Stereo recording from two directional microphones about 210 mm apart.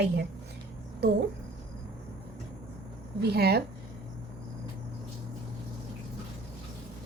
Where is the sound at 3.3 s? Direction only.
50° right (ahead or behind).